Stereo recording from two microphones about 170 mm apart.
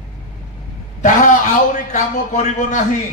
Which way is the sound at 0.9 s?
50° left (ahead or behind).